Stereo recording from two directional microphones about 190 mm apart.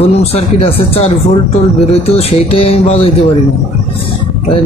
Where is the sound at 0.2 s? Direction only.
30° left (ahead or behind).